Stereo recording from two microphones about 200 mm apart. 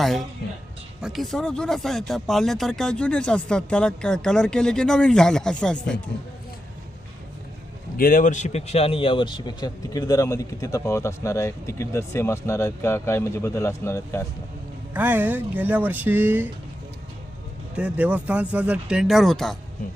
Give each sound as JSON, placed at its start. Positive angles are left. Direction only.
{"t": 0.0, "sound": "speech", "side_deg": 0}
{"t": 7.9, "sound": "speech", "side_deg": 45}
{"t": 14.9, "sound": "speech", "side_deg": -10}
{"t": 17.7, "sound": "speech", "side_deg": -5}